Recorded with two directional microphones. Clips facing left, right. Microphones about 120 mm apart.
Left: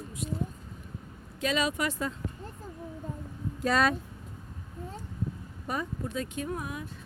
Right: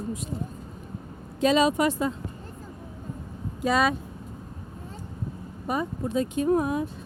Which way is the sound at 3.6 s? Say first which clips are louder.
Right 3 dB; 5° right (ahead or behind).